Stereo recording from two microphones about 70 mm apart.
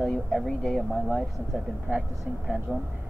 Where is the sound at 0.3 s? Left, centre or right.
Centre.